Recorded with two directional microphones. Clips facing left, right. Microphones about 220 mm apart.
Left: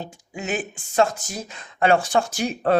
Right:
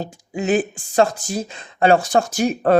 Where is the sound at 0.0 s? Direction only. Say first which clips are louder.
Right 8 dB; 35° right (ahead or behind).